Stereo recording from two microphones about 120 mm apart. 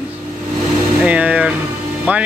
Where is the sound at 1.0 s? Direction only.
10° right (ahead or behind).